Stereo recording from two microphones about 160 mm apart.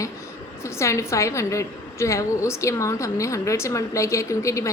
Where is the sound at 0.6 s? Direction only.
20° left (ahead or behind).